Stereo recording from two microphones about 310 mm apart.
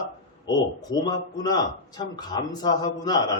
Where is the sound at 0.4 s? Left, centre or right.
Centre.